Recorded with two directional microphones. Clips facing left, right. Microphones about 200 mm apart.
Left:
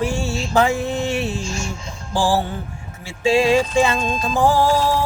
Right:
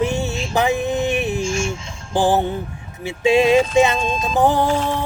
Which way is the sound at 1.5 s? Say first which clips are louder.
Right 5 dB; 35° left (ahead or behind).